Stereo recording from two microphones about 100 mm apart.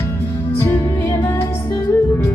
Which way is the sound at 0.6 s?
25° left (ahead or behind).